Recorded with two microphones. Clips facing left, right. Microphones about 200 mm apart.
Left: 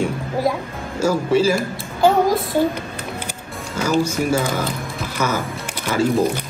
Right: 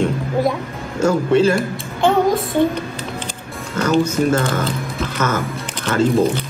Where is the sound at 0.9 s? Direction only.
5° left (ahead or behind).